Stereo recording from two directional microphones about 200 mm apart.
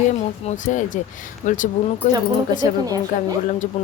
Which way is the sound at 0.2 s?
35° left (ahead or behind).